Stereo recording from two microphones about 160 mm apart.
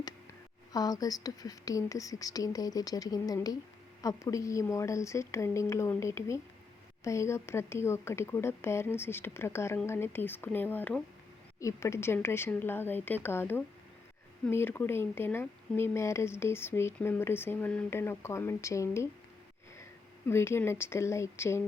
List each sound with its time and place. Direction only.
0.7 s speech: 25° left (ahead or behind)
20.2 s speech: 15° left (ahead or behind)